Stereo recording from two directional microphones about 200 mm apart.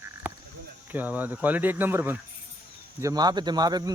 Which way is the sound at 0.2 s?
10° right (ahead or behind).